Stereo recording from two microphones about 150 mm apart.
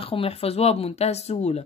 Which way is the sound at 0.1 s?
40° left (ahead or behind).